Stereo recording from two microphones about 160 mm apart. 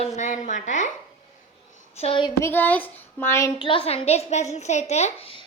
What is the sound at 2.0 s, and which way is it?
Speech, 35° left (ahead or behind).